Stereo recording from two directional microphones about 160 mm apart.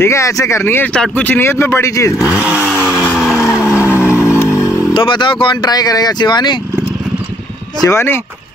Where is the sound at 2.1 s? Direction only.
10° right (ahead or behind).